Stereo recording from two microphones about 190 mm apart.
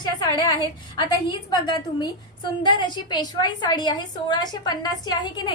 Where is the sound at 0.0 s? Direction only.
20° left (ahead or behind).